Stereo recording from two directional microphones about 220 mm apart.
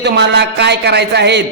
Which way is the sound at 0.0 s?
50° right (ahead or behind).